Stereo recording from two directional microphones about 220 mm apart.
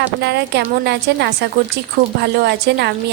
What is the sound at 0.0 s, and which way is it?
A woman's voice, 50° right (ahead or behind).